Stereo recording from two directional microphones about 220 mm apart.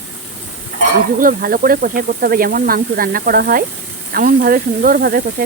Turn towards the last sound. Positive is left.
turn(degrees=-40)  # may be behind; listen again after turning